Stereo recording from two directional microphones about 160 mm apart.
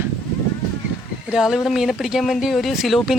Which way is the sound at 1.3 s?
5° right (ahead or behind).